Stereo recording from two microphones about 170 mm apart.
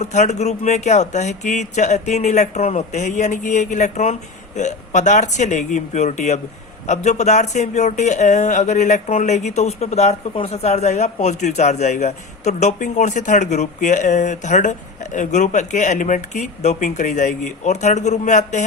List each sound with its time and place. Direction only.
0.0 s speech: 45° left (ahead or behind)